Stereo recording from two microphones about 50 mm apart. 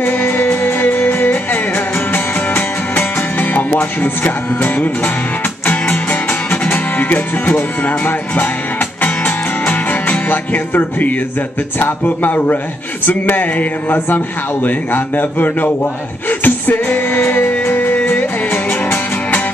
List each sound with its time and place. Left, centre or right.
0.0 s music: left
6.5 s music: left
11.8 s a man's voice: left
16.3 s music: left